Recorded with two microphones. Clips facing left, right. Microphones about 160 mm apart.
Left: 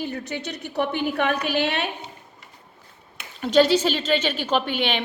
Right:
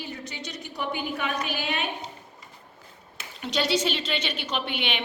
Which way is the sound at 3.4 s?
45° left (ahead or behind).